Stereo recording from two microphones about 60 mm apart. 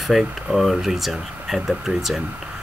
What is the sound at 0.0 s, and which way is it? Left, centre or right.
Speech, centre.